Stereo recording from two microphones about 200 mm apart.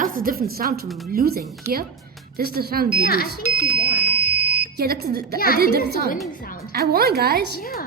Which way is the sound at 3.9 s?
5° right (ahead or behind).